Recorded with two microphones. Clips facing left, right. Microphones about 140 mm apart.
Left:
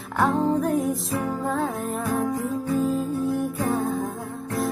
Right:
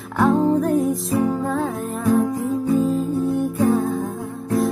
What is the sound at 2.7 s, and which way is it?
Music, centre (ahead or behind).